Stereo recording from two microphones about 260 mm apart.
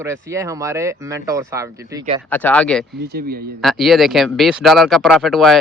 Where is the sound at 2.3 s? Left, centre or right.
Centre.